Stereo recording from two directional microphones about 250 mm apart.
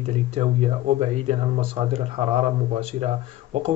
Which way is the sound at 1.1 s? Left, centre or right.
Right.